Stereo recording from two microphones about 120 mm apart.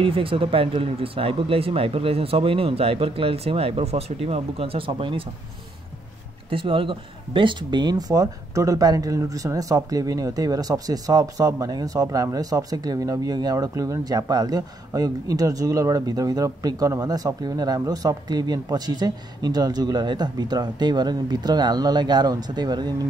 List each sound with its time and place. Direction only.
0.0 s speech: 50° right (ahead or behind)
6.5 s speech: 45° right (ahead or behind)